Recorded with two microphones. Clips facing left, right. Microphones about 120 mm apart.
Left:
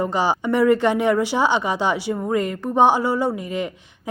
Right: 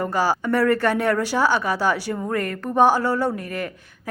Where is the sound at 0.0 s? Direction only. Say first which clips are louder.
Left 1 dB; 20° left (ahead or behind).